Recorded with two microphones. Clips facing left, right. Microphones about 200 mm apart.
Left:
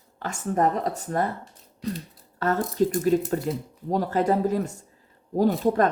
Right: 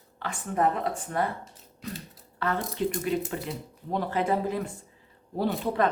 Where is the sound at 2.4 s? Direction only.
45° left (ahead or behind).